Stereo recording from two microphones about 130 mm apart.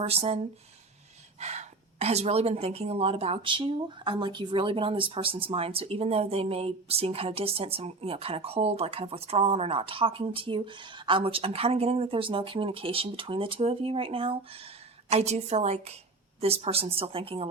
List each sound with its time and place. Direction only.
0.0 s a woman's voice: 50° right (ahead or behind)
15.1 s a woman's voice: 55° right (ahead or behind)